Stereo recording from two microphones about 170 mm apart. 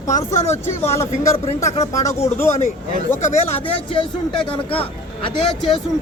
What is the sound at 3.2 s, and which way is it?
Speech, 40° left (ahead or behind).